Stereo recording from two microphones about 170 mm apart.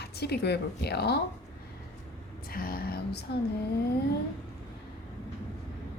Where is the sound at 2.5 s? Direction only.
60° left (ahead or behind).